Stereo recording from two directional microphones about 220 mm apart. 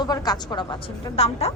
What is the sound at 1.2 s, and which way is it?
Speech, 30° left (ahead or behind).